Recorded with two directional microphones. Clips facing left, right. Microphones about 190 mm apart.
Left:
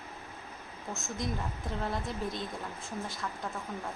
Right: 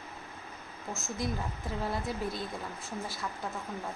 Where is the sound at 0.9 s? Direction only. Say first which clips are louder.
Right 1 dB; centre (ahead or behind).